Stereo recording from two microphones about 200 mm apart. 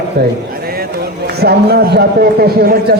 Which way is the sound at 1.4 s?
50° right (ahead or behind).